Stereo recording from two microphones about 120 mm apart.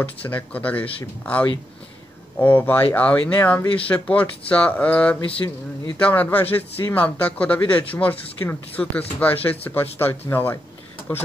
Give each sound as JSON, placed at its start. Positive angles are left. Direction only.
{"t": 0.0, "sound": "speech", "side_deg": 15}
{"t": 2.3, "sound": "speech", "side_deg": 15}